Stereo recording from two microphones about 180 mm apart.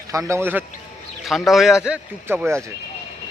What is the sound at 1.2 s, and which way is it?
A man's voice, centre (ahead or behind).